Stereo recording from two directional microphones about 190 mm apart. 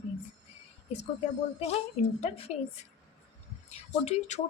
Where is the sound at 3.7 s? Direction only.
35° left (ahead or behind).